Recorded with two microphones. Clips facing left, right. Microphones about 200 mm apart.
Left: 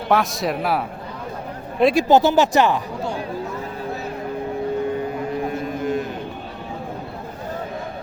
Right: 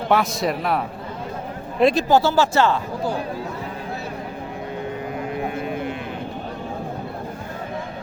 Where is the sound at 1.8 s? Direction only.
10° left (ahead or behind).